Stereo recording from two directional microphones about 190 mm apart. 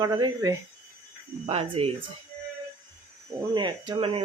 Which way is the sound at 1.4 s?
30° right (ahead or behind).